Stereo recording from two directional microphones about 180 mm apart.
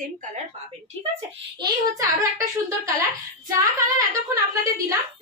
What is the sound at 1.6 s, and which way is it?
A woman's voice, 20° right (ahead or behind).